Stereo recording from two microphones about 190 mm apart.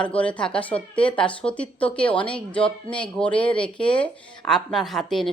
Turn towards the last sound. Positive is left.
turn(degrees=0)  # may be behind; listen again after turning